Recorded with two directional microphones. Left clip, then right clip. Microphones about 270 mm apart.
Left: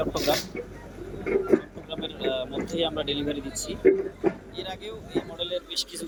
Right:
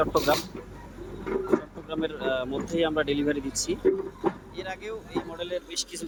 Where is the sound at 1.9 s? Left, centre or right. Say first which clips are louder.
Right 1 dB; centre.